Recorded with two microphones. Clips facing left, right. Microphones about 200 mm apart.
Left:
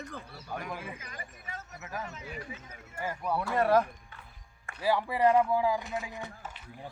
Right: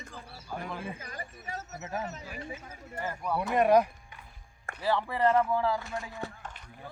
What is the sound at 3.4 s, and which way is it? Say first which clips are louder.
Speech: right 3 dB; 20° right (ahead or behind).